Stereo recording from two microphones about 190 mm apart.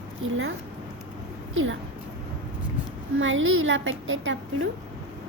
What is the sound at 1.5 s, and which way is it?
Speech, 90° right.